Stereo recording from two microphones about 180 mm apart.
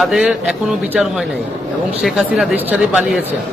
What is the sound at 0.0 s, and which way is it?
Speech, centre (ahead or behind).